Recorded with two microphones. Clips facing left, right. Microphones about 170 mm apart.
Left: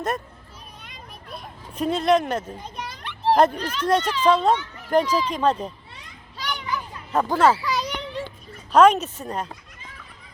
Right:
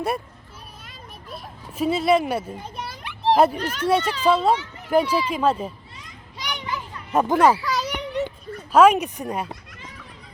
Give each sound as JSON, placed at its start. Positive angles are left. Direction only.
{"t": 0.9, "sound": "children playing", "side_deg": -5}
{"t": 3.8, "sound": "speech", "side_deg": -10}
{"t": 6.4, "sound": "children playing", "side_deg": -15}
{"t": 7.6, "sound": "children playing", "side_deg": 0}
{"t": 8.7, "sound": "speech", "side_deg": -10}